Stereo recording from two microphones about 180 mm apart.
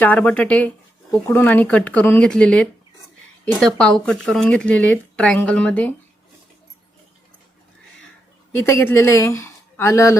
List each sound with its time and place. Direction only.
0.0 s a woman's voice: 10° left (ahead or behind)
8.6 s speech: 15° left (ahead or behind)